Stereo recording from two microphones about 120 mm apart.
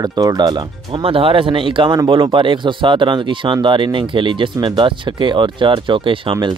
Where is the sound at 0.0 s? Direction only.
35° right (ahead or behind).